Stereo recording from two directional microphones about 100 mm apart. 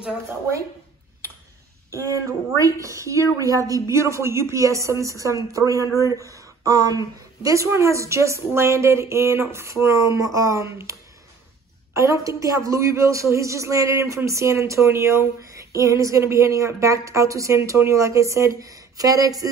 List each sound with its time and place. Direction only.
1.9 s speech: 30° right (ahead or behind)